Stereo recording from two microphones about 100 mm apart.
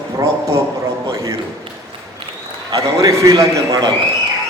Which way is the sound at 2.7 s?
35° right (ahead or behind).